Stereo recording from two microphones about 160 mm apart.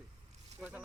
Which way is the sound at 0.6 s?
10° right (ahead or behind).